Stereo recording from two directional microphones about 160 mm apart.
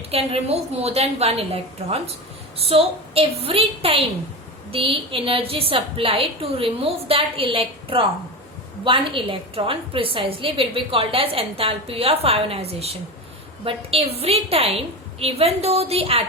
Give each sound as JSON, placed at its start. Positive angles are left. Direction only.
{"t": 0.1, "sound": "a woman's voice", "side_deg": -40}